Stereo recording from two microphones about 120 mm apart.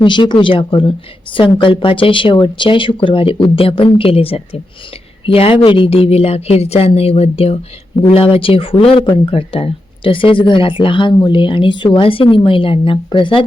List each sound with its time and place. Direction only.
0.0 s a woman's voice: 40° left (ahead or behind)